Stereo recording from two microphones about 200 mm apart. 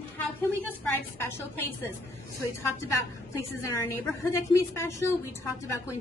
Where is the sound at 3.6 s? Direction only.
15° left (ahead or behind).